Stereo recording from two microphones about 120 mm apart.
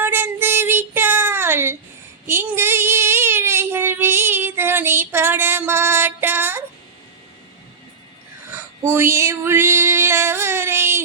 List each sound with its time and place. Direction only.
0.0 s child singing: 20° right (ahead or behind)
8.5 s female singing: 20° right (ahead or behind)